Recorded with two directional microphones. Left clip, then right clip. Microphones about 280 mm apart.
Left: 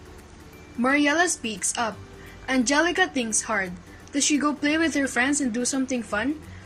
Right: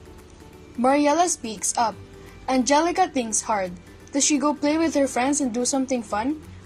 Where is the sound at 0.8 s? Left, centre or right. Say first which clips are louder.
Right 2 dB; centre.